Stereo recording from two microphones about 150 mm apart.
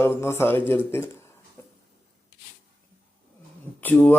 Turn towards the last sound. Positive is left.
turn(degrees=10)  # may be behind; listen again after turning